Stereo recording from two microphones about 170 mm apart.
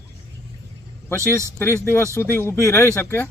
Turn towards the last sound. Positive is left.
turn(degrees=15)  # may be behind; listen again after turning